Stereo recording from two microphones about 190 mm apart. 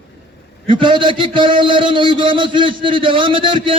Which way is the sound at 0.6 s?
25° right (ahead or behind).